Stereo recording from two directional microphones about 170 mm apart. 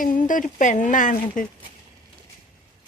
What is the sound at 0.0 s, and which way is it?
Speech, 50° left (ahead or behind).